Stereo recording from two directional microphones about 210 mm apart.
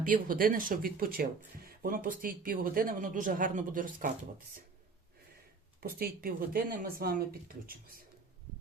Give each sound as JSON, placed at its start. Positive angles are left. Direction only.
{"t": 0.0, "sound": "speech", "side_deg": -40}
{"t": 5.8, "sound": "speech", "side_deg": -45}